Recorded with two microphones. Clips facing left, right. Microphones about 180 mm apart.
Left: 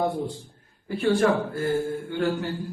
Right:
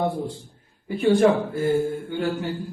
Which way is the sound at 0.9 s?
20° right (ahead or behind).